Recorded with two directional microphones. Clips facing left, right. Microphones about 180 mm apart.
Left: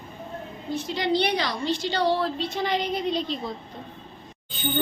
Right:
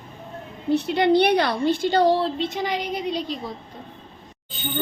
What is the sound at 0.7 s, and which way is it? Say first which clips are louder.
A woman's voice: right 7 dB; 65° right (ahead or behind).